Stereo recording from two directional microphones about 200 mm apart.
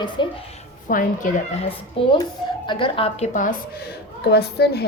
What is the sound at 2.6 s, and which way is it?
Speech, 25° left (ahead or behind).